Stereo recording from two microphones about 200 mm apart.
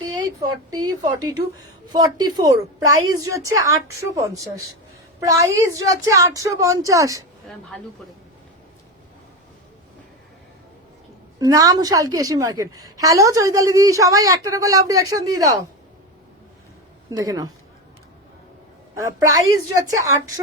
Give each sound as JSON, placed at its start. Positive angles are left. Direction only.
{"t": 0.7, "sound": "a woman's voice", "side_deg": -20}
{"t": 11.3, "sound": "a woman's voice", "side_deg": -20}
{"t": 17.1, "sound": "a woman's voice", "side_deg": -20}
{"t": 18.9, "sound": "a woman's voice", "side_deg": -15}